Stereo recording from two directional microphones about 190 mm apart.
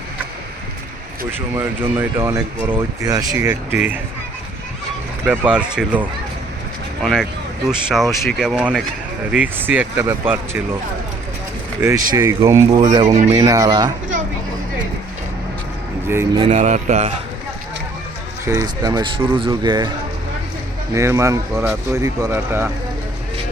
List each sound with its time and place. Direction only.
1.5 s speech: 10° right (ahead or behind)
5.2 s speech: 10° right (ahead or behind)
11.8 s speech: 10° right (ahead or behind)
16.4 s speech: 35° right (ahead or behind)
18.4 s speech: 20° right (ahead or behind)
20.9 s speech: 15° right (ahead or behind)